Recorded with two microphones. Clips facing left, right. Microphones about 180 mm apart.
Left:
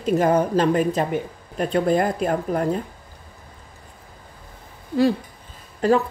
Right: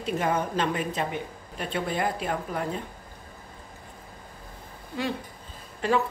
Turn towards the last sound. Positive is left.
turn(degrees=40)  # may be behind; listen again after turning